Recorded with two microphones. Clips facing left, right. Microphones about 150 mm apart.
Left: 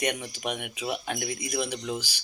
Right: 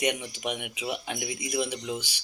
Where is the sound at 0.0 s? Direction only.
10° right (ahead or behind).